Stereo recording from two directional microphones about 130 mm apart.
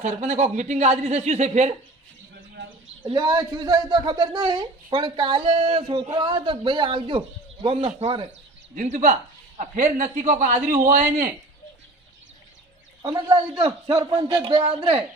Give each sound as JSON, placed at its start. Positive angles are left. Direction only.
{"t": 0.0, "sound": "speech", "side_deg": -60}
{"t": 3.0, "sound": "speech", "side_deg": -35}
{"t": 8.7, "sound": "a man's voice", "side_deg": -70}
{"t": 9.6, "sound": "a man's voice", "side_deg": -85}
{"t": 13.0, "sound": "speech", "side_deg": -30}